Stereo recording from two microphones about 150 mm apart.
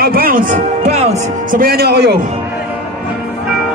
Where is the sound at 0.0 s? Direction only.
80° right.